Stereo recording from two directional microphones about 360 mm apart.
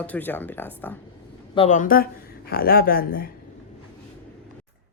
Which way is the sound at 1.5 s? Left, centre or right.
Centre.